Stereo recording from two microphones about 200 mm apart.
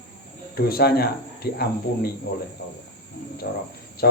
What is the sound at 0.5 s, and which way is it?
Speech, 50° left (ahead or behind).